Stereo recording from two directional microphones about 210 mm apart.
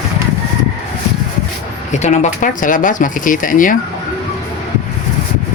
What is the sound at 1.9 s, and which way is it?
Speech, 35° left (ahead or behind).